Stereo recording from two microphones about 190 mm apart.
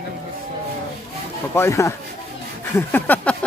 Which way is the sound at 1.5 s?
15° left (ahead or behind).